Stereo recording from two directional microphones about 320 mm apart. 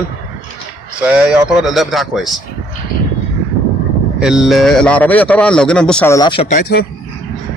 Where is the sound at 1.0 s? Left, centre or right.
Centre.